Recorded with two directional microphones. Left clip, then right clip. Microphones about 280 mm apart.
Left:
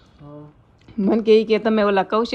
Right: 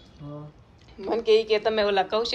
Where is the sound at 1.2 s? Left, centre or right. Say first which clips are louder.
Left 5 dB; left.